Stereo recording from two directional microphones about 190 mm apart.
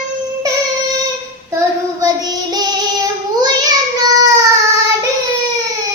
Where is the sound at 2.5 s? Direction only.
20° right (ahead or behind).